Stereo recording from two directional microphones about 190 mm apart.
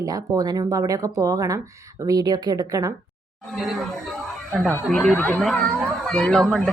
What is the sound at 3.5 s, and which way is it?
Speech, centre (ahead or behind).